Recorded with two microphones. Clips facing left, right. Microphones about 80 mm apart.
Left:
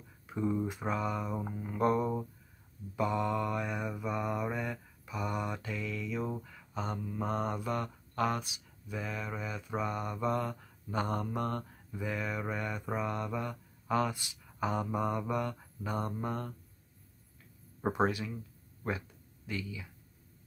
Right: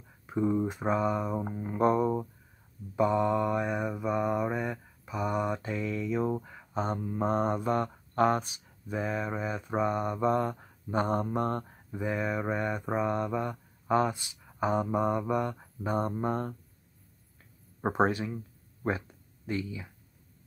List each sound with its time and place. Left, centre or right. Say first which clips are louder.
0.3 s mantra: right 5 dB; centre
16.2 s speech: right 6 dB; right
17.8 s speech: right 4 dB; right